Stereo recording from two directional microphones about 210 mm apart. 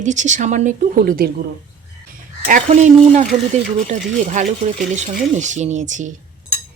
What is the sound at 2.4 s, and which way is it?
Speech, 35° right (ahead or behind).